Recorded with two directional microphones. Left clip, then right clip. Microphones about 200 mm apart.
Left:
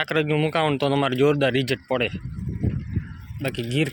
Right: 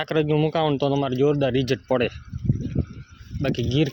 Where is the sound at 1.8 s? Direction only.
30° right (ahead or behind).